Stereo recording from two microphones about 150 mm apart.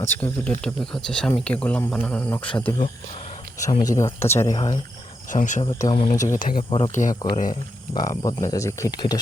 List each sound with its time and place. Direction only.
0.1 s speech: 10° left (ahead or behind)
3.6 s speech: 25° left (ahead or behind)
5.3 s speech: 55° left (ahead or behind)
6.7 s speech: 35° left (ahead or behind)
6.9 s speech: 55° left (ahead or behind)
7.9 s speech: 25° left (ahead or behind)